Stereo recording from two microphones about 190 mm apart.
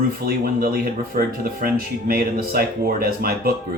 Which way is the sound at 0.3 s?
50° right (ahead or behind).